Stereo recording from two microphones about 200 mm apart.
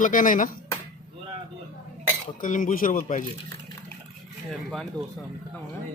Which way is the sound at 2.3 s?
40° left (ahead or behind).